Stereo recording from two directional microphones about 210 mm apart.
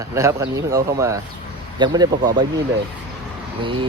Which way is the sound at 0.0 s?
15° right (ahead or behind).